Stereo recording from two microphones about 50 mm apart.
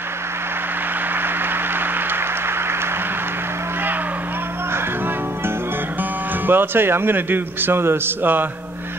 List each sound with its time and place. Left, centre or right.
6.4 s speech: right